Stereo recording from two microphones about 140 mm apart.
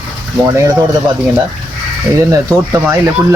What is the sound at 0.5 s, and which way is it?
Speech, 20° right (ahead or behind).